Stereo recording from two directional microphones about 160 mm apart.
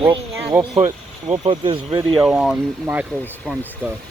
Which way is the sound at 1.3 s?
30° right (ahead or behind).